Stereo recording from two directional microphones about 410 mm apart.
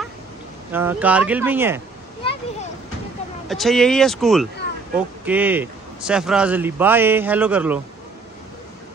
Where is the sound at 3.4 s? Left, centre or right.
Centre.